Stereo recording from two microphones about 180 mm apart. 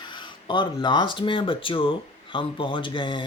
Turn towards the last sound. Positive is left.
turn(degrees=25)  # may be behind; listen again after turning